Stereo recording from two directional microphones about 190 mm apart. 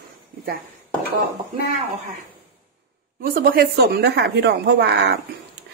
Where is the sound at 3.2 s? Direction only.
50° right (ahead or behind); by 5.1 s 65° right (ahead or behind).